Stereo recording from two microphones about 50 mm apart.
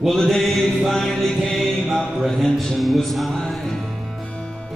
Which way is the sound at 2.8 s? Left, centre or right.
Centre.